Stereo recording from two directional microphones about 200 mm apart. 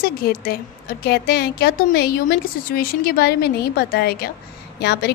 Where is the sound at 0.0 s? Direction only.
50° left (ahead or behind).